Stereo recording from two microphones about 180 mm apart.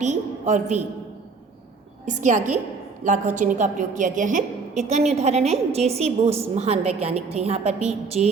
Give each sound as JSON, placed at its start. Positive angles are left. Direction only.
{"t": 0.0, "sound": "a woman's voice", "side_deg": -40}
{"t": 2.0, "sound": "a woman's voice", "side_deg": -40}